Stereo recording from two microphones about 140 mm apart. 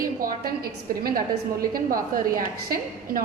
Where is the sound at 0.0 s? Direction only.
90° right.